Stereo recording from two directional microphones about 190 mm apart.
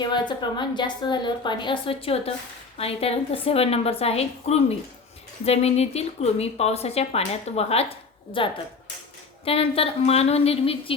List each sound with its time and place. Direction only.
0.0 s a woman's voice: 25° left (ahead or behind)